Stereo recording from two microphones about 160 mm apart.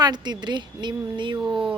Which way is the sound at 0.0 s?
25° right (ahead or behind).